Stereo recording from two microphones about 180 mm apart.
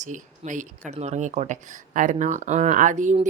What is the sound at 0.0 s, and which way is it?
Speech, 45° right (ahead or behind).